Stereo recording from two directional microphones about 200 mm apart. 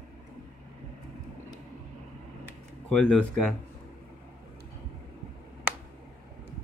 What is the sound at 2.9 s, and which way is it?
Speech, 5° left (ahead or behind).